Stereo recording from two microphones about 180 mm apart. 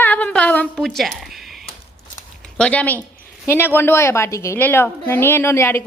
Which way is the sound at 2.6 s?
5° left (ahead or behind).